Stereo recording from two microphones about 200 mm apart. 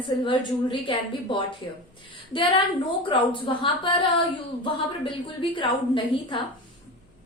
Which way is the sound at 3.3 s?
25° left (ahead or behind).